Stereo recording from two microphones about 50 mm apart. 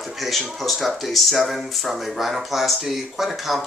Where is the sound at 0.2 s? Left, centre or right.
Centre.